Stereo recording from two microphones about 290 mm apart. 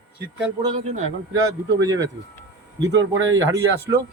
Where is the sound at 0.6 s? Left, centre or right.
Right.